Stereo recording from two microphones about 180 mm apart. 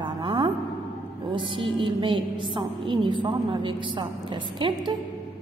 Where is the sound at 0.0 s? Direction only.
25° right (ahead or behind).